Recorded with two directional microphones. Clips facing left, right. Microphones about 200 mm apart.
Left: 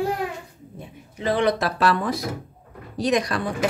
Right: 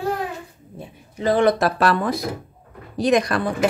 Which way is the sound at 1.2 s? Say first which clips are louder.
Right 4 dB; 45° right (ahead or behind).